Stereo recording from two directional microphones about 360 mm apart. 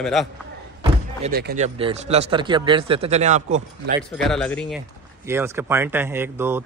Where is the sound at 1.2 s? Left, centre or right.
Right.